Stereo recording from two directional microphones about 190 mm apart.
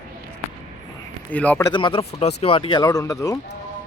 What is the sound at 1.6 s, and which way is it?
Speech, 25° left (ahead or behind).